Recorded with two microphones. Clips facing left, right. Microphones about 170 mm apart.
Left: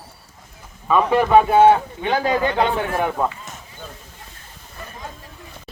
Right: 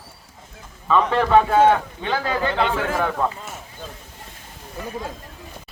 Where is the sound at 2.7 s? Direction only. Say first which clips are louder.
Left 1 dB; 90° right.